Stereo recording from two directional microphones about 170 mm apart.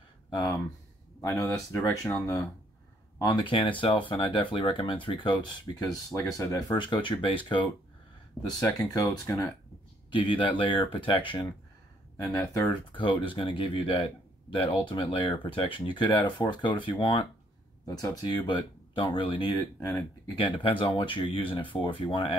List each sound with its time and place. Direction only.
0.3 s speech: 25° left (ahead or behind)
20.3 s speech: 30° left (ahead or behind)